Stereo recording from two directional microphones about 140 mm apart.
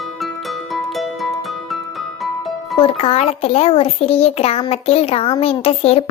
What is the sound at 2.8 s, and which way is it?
A child's voice, 40° left (ahead or behind).